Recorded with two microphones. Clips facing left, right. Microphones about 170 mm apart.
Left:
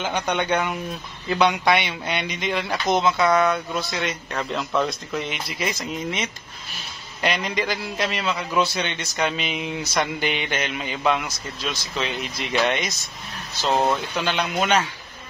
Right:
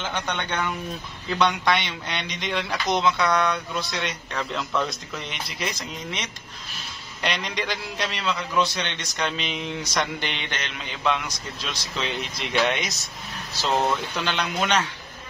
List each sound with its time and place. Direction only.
0.0 s a man's voice: 10° left (ahead or behind)
14.2 s speech: 5° left (ahead or behind)